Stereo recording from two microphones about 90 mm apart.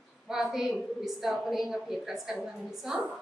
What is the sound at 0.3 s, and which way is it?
A woman's voice, 5° right (ahead or behind).